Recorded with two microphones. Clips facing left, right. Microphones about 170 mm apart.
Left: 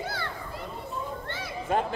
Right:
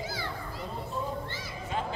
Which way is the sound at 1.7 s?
55° left (ahead or behind).